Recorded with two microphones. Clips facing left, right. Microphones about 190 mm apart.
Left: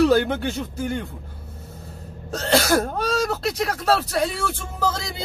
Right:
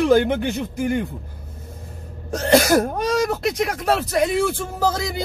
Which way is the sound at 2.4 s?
15° right (ahead or behind).